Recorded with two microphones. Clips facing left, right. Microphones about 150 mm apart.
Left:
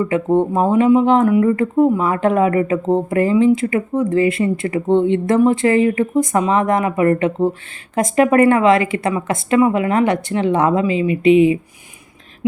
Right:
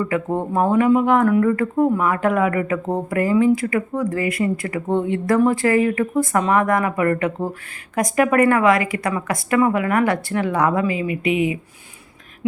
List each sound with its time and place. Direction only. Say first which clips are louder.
0.0 s speech: left 6 dB; 20° left (ahead or behind)